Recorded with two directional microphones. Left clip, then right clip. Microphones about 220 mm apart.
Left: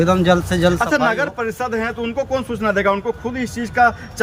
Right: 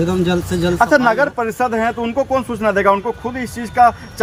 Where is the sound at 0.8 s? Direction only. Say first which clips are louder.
Right 4 dB; 20° right (ahead or behind).